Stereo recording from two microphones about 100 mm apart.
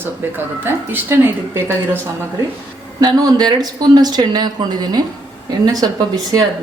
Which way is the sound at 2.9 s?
45° right (ahead or behind).